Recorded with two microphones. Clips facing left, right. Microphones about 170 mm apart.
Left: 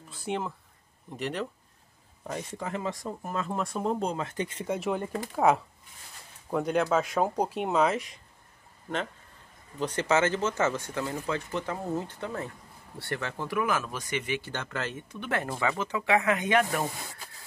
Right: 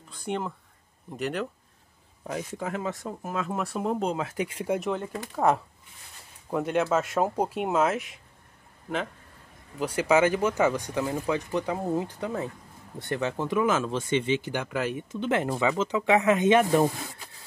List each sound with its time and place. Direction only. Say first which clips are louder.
0.1 s speech: right 1 dB; 5° left (ahead or behind)
4.7 s speech: left 2 dB; 5° left (ahead or behind)
9.8 s speech: right 3 dB; 10° right (ahead or behind)
14.5 s speech: right 5 dB; 10° right (ahead or behind)